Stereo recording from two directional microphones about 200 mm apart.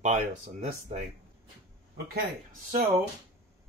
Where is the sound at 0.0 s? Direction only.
35° right (ahead or behind).